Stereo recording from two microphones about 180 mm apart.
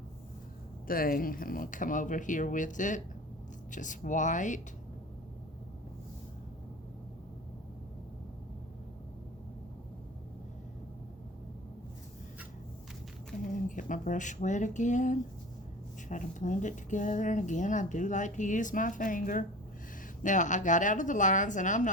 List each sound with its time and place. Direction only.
0.9 s speech: 55° left (ahead or behind)
13.7 s speech: 45° left (ahead or behind)